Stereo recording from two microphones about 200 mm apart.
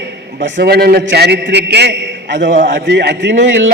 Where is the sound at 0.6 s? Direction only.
50° right (ahead or behind).